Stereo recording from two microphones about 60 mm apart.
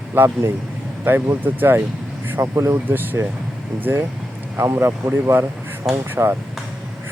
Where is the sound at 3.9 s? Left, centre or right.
Right.